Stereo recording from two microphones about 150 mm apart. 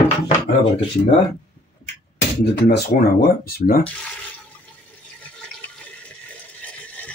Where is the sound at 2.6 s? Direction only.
90° left.